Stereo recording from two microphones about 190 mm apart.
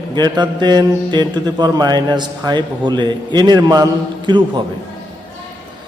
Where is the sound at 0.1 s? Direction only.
25° right (ahead or behind).